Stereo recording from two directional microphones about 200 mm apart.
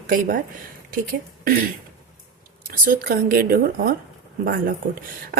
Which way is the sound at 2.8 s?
45° right (ahead or behind).